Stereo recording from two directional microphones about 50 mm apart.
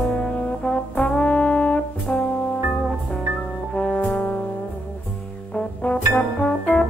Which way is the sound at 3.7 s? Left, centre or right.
Left.